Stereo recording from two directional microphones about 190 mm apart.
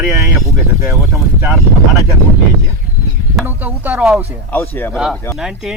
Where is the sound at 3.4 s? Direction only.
10° right (ahead or behind).